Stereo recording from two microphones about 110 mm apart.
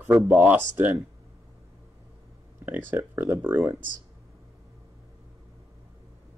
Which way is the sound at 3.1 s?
20° right (ahead or behind).